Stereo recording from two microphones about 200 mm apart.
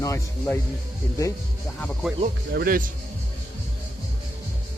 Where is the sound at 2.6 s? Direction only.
45° right (ahead or behind).